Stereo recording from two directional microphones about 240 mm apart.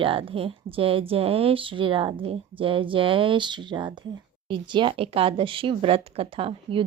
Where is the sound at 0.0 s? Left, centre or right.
Right.